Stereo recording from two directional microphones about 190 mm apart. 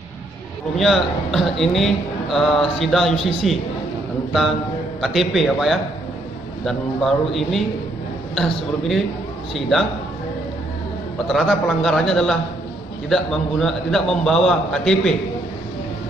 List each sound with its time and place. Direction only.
0.7 s a man's voice: centre (ahead or behind)
5.0 s a man's voice: centre (ahead or behind)
11.2 s a man's voice: centre (ahead or behind)